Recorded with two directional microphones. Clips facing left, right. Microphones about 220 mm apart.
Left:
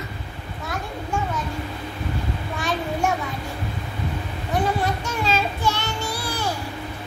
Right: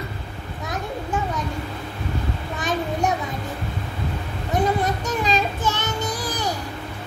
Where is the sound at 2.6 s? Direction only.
20° right (ahead or behind).